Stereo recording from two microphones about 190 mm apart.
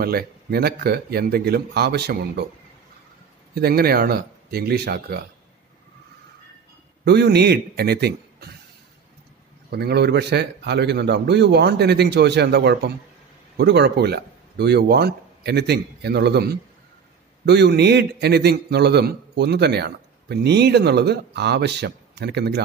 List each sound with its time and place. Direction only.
0.0 s a man's voice: 50° right (ahead or behind)
3.5 s a man's voice: 55° right (ahead or behind)
7.1 s a man's voice: 60° right (ahead or behind)
9.7 s a man's voice: 60° right (ahead or behind)